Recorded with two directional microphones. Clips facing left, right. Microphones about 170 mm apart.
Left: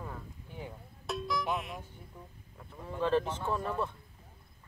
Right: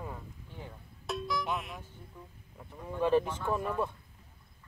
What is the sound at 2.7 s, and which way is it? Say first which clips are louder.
Speech: right 2 dB; 15° right (ahead or behind).